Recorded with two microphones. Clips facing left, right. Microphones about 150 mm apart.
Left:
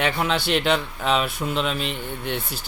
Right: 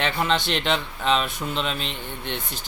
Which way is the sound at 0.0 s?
5° left (ahead or behind).